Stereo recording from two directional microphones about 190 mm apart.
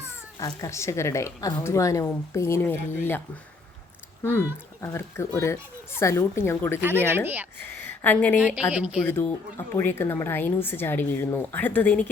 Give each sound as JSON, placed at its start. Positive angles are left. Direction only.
{"t": 0.3, "sound": "a woman's voice", "side_deg": 20}
{"t": 4.2, "sound": "a woman's voice", "side_deg": 10}
{"t": 7.1, "sound": "speech", "side_deg": -10}
{"t": 7.6, "sound": "speech", "side_deg": 10}
{"t": 8.5, "sound": "a woman's voice", "side_deg": -5}
{"t": 9.0, "sound": "a woman's voice", "side_deg": 10}